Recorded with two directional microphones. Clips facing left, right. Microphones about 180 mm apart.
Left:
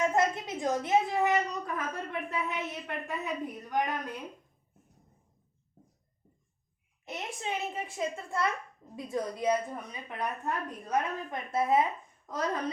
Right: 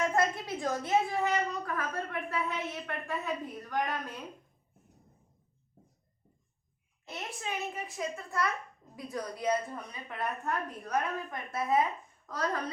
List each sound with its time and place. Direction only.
0.0 s a woman's voice: 20° left (ahead or behind)
7.0 s a woman's voice: 20° left (ahead or behind)